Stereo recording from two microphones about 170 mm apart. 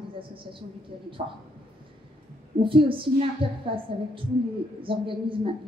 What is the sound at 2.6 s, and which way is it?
A woman's voice, 30° right (ahead or behind).